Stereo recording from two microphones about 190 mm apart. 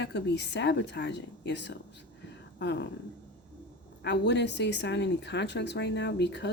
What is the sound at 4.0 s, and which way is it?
Speech, 65° left (ahead or behind).